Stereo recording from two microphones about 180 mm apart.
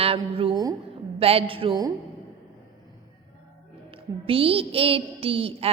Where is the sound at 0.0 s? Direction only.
30° right (ahead or behind).